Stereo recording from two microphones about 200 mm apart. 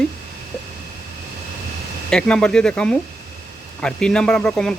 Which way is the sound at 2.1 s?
5° left (ahead or behind).